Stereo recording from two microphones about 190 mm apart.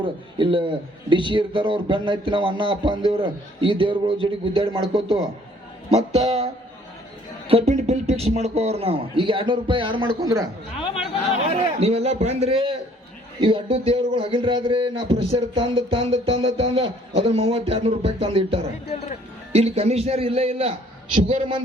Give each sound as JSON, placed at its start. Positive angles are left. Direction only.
{"t": 0.0, "sound": "a man's voice", "side_deg": -25}
{"t": 7.7, "sound": "speech", "side_deg": -35}
{"t": 10.8, "sound": "a man's voice", "side_deg": 30}
{"t": 11.4, "sound": "a man's voice", "side_deg": -35}